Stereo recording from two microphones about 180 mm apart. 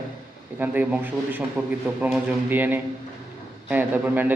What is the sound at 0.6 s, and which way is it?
A man's voice, 10° right (ahead or behind).